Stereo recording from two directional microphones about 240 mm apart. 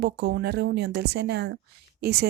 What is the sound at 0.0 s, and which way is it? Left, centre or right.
A woman's voice, right.